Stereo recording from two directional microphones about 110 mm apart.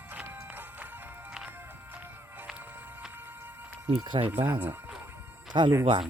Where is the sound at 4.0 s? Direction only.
45° right (ahead or behind).